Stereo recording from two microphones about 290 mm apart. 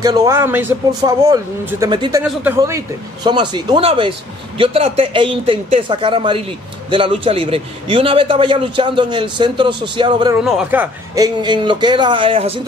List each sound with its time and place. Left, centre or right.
0.0 s a man's voice: centre
10.4 s a man's voice: centre